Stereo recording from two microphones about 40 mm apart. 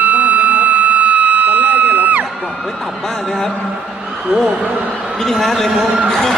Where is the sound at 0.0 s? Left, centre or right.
Right.